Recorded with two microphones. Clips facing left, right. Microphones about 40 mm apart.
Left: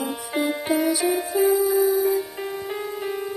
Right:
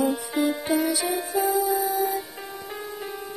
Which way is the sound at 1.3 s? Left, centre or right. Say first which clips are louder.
Left 3 dB; left.